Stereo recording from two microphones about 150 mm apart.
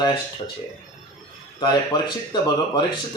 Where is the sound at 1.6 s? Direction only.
30° left (ahead or behind).